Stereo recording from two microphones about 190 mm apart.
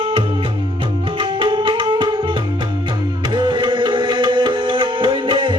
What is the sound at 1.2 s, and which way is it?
Tabla, 25° right (ahead or behind).